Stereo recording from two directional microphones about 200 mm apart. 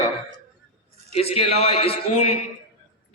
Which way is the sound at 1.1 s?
30° left (ahead or behind).